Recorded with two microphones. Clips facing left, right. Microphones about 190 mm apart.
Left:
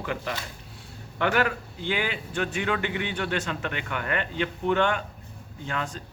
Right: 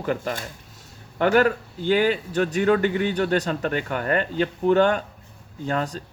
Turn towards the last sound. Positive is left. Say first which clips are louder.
# right 6 dB
turn(degrees=-40)  # may be behind; listen again after turning